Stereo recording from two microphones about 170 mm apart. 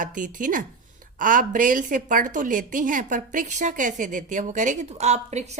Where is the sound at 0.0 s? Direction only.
50° right (ahead or behind).